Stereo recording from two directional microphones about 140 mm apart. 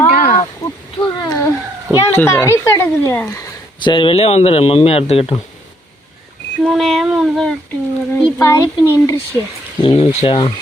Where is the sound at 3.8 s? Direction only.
35° left (ahead or behind).